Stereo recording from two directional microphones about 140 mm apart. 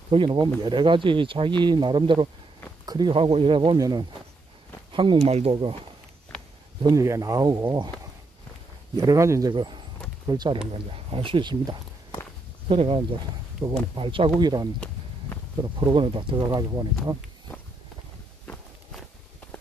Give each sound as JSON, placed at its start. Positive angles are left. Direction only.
{"t": 0.1, "sound": "speech", "side_deg": -35}
{"t": 3.7, "sound": "speech", "side_deg": -25}
{"t": 4.9, "sound": "speech", "side_deg": -35}
{"t": 6.8, "sound": "speech", "side_deg": -25}
{"t": 8.9, "sound": "speech", "side_deg": -25}
{"t": 9.5, "sound": "speech", "side_deg": -35}
{"t": 10.7, "sound": "speech", "side_deg": -40}